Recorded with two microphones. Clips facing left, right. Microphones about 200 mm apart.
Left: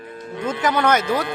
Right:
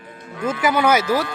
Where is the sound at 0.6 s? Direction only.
10° right (ahead or behind).